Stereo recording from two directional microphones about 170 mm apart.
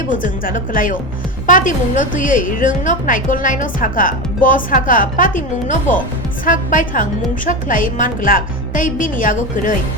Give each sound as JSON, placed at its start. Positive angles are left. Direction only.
{"t": 0.1, "sound": "a woman's voice", "side_deg": 50}